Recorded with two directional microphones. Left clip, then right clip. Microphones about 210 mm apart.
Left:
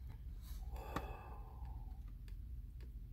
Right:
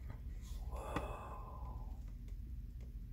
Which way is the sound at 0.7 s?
10° right (ahead or behind).